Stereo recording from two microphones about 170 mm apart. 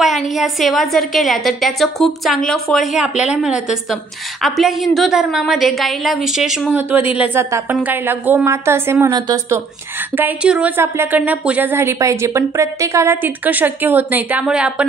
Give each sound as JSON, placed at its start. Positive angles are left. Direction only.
{"t": 0.0, "sound": "a woman's voice", "side_deg": 0}
{"t": 10.1, "sound": "speech", "side_deg": -10}